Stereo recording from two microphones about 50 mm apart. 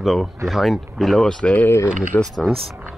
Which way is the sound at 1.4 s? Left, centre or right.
Left.